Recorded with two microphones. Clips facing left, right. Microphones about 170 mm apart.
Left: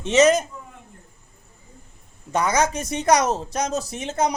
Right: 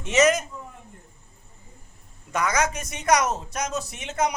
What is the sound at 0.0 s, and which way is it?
Speech, 35° left (ahead or behind).